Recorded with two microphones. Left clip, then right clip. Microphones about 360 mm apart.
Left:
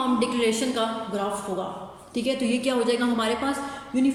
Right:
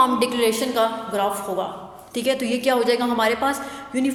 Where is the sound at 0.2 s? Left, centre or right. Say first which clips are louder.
Right 4 dB; centre.